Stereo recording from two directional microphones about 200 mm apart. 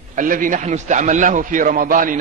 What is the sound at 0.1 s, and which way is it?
A man's voice, 40° right (ahead or behind).